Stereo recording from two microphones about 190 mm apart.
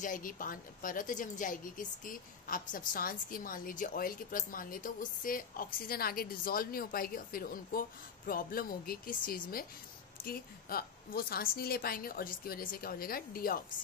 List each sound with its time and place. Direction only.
0.0 s a woman's voice: 45° left (ahead or behind)